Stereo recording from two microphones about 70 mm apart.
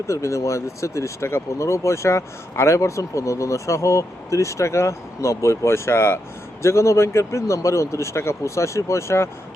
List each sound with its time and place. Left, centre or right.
0.1 s speech: left